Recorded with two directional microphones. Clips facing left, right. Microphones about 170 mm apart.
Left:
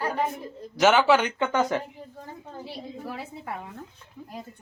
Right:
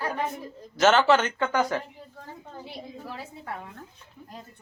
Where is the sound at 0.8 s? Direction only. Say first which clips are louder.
Even; 10° left (ahead or behind).